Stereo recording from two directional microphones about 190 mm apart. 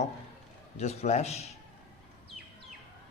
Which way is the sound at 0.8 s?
35° left (ahead or behind).